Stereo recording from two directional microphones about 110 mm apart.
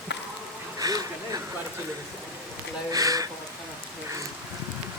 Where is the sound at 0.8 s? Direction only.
35° right (ahead or behind).